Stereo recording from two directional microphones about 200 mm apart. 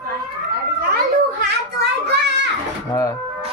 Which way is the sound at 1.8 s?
60° right (ahead or behind).